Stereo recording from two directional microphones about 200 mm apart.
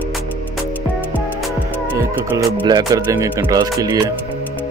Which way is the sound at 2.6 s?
20° right (ahead or behind).